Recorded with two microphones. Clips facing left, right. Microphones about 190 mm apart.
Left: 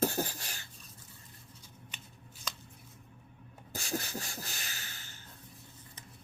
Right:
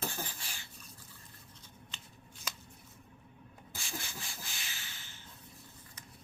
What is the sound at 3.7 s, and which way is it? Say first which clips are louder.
Beatboxing: left 8 dB; 40° left (ahead or behind).